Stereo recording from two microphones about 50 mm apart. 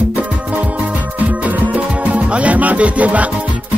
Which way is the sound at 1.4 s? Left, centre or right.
Right.